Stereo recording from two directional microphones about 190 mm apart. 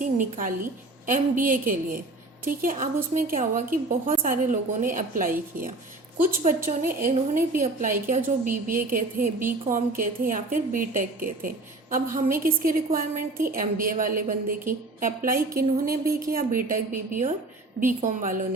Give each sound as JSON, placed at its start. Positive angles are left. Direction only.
{"t": 0.0, "sound": "a woman's voice", "side_deg": -45}